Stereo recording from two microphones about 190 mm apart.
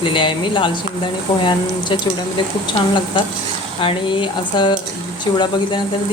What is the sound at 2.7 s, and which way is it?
Speech, 25° left (ahead or behind).